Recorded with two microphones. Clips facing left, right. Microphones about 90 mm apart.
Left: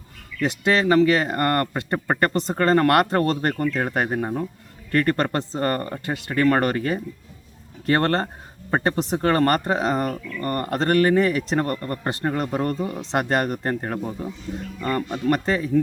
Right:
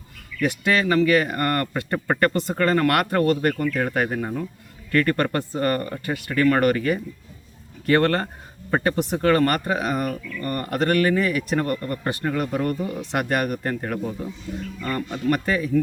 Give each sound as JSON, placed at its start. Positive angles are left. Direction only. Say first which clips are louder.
{"t": 0.4, "sound": "speech", "louder": "left 1 dB", "side_deg": 25}
{"t": 2.6, "sound": "speech", "louder": "left 3 dB", "side_deg": 35}